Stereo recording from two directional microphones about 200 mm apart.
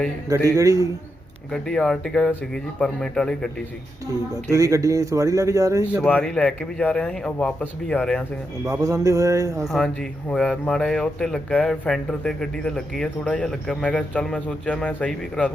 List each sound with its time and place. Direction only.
0.3 s speech: 15° right (ahead or behind)
1.5 s speech: 5° left (ahead or behind)
4.5 s speech: 15° right (ahead or behind)
6.0 s speech: 5° left (ahead or behind)
8.6 s speech: 15° right (ahead or behind)
9.6 s speech: centre (ahead or behind)